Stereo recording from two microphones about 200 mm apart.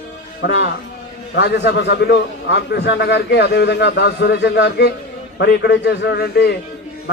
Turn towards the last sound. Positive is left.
turn(degrees=55)  # may be behind; listen again after turning